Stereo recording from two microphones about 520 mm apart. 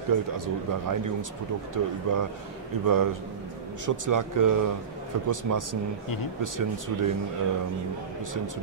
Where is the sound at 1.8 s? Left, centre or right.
Right.